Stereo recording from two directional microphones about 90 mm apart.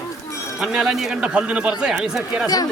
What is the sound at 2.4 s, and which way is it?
Speech, 45° left (ahead or behind).